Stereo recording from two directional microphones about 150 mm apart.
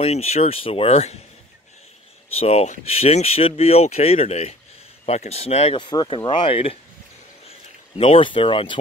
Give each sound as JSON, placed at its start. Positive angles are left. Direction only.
{"t": 0.0, "sound": "speech", "side_deg": 45}
{"t": 2.3, "sound": "speech", "side_deg": 40}
{"t": 5.8, "sound": "speech", "side_deg": 30}
{"t": 8.0, "sound": "speech", "side_deg": 35}